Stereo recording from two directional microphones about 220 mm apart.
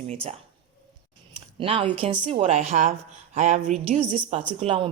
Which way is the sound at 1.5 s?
25° right (ahead or behind).